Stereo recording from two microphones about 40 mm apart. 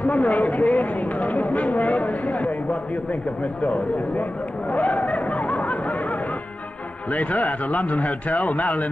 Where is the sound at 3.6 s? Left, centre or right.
Left.